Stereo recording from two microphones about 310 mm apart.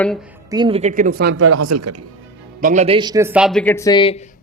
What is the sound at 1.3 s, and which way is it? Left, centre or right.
Speech, right.